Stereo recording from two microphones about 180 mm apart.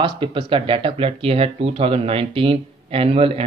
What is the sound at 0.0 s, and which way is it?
Speech, 25° right (ahead or behind).